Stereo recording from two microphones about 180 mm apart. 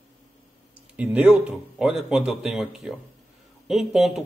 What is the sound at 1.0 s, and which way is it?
Speech, 5° right (ahead or behind).